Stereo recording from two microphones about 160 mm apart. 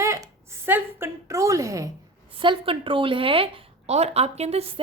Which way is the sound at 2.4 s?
35° right (ahead or behind).